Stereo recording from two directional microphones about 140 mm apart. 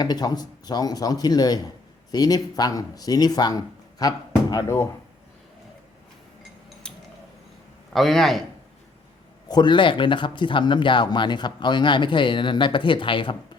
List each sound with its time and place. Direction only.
0.0 s speech: 30° left (ahead or behind)
6.8 s a sound: 5° left (ahead or behind)
7.9 s a man's voice: centre (ahead or behind)
9.5 s speech: 35° left (ahead or behind)